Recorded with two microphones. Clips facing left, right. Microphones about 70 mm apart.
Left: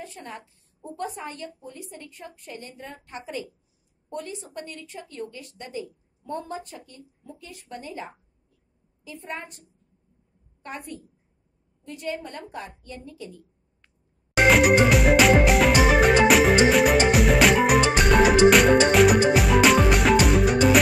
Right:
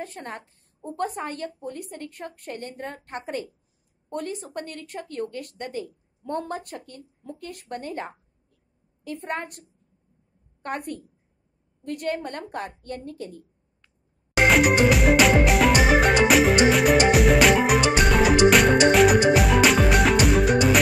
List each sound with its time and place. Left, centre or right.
0.0 s a woman's voice: right
14.3 s music: centre